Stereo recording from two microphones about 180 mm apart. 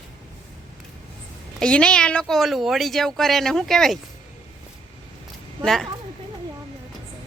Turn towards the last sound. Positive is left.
turn(degrees=0)  # may be behind; listen again after turning